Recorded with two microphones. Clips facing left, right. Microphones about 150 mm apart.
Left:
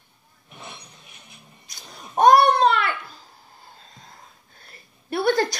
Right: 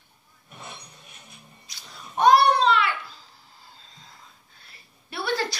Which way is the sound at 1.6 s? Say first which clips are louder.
Left 3 dB; 45° left (ahead or behind).